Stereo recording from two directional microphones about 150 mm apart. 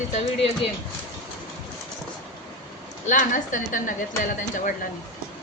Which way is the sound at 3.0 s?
60° left (ahead or behind).